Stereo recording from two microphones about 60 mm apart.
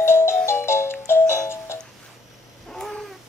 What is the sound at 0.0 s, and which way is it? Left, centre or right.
Music, left.